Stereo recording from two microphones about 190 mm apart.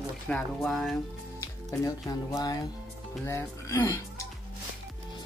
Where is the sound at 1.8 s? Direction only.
20° left (ahead or behind).